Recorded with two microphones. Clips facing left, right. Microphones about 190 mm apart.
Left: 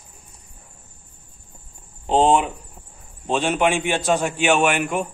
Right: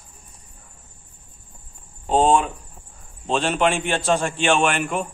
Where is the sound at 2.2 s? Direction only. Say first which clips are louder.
Left 1 dB; 20° left (ahead or behind).